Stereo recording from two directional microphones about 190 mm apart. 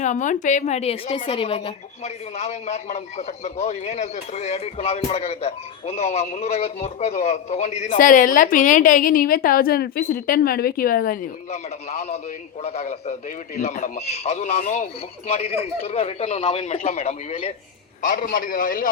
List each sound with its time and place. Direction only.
0.0 s a woman's voice: 40° left (ahead or behind)
18.0 s a man's voice: 45° left (ahead or behind)